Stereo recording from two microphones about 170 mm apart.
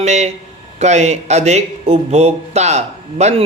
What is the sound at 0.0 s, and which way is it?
A man's voice, 40° right (ahead or behind).